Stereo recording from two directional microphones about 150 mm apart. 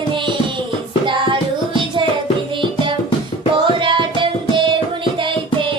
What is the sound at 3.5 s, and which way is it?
Music, 35° right (ahead or behind).